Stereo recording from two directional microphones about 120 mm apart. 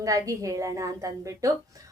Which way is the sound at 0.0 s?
30° right (ahead or behind).